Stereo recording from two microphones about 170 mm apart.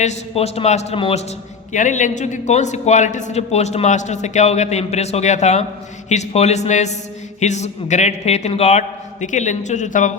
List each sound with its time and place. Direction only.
0.0 s a man's voice: 40° left (ahead or behind)
1.7 s a man's voice: 45° left (ahead or behind)